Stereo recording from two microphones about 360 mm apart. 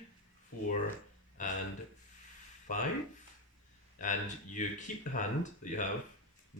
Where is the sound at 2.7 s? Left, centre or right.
Left.